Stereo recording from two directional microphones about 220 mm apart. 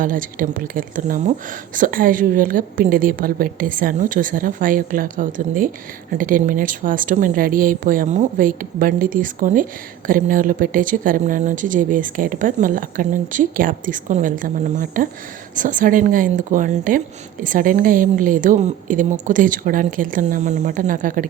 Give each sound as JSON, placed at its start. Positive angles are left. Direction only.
{"t": 0.0, "sound": "a woman's voice", "side_deg": -40}